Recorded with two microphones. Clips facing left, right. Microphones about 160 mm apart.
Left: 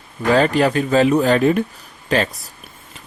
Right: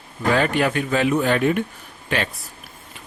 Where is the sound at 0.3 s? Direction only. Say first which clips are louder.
Left 5 dB; 35° left (ahead or behind).